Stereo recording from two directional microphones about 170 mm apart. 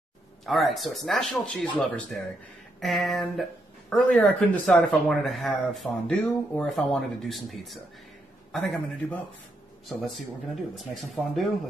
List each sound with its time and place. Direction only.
0.5 s speech: centre (ahead or behind)
9.0 s speech: 5° left (ahead or behind)
10.5 s speech: centre (ahead or behind)